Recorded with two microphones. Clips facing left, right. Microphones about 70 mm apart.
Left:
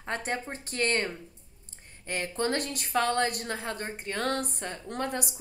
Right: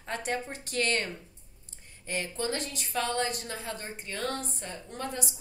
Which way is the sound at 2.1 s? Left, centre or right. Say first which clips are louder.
Left 3 dB; left.